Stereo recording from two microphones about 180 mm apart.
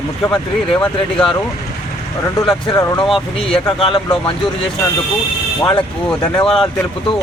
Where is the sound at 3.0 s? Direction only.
Centre (ahead or behind).